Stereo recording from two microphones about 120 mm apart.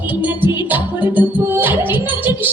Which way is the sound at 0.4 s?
15° right (ahead or behind).